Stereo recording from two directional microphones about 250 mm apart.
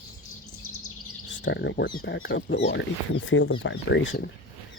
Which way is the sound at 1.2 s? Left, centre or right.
Left.